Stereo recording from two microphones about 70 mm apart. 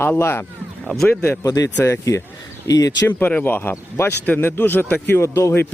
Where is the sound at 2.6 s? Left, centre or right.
Left.